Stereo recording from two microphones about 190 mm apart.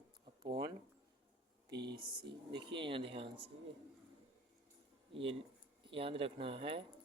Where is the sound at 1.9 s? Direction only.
55° right (ahead or behind).